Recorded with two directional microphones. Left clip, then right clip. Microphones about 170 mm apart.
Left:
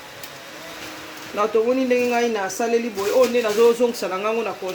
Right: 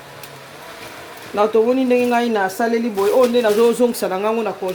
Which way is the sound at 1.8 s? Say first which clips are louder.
Right 3 dB; 55° right (ahead or behind).